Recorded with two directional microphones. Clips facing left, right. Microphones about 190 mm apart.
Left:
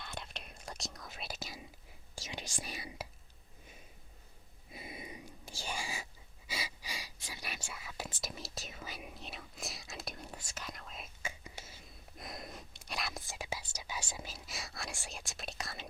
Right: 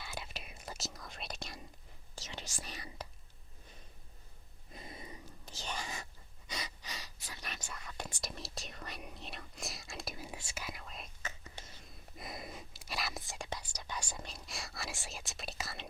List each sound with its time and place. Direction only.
0.0 s whispering: 5° right (ahead or behind); by 2.5 s 10° left (ahead or behind)
2.6 s speech: 10° left (ahead or behind)
4.7 s whispering: 10° left (ahead or behind)